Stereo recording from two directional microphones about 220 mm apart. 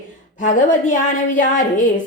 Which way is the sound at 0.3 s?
35° left (ahead or behind).